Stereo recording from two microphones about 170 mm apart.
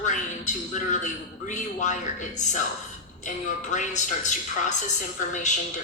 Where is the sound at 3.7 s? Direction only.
45° left (ahead or behind).